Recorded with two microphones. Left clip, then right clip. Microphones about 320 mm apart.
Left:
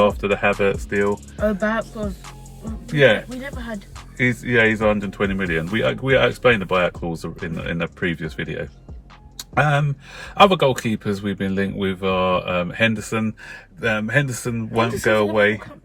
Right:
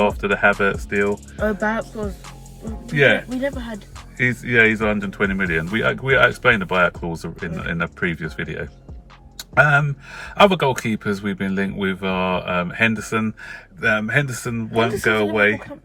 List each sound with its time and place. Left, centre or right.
0.0 s speech: centre